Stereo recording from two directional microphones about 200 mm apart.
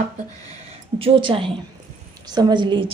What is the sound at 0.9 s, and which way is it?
A woman's voice, 25° right (ahead or behind).